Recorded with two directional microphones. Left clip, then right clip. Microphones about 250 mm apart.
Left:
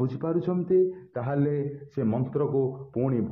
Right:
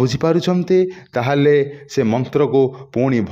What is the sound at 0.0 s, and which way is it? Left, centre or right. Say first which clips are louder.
A man's voice: right 12 dB; right.